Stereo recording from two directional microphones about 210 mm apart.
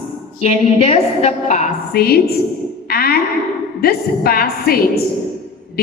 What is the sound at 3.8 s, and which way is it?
A woman's voice, 45° left (ahead or behind).